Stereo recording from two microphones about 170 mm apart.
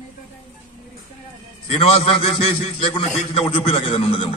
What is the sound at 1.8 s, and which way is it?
A man's voice, 35° left (ahead or behind).